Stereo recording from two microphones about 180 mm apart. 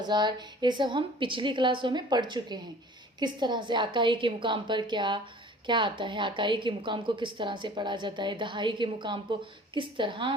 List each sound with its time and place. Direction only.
0.1 s a woman's voice: 25° right (ahead or behind)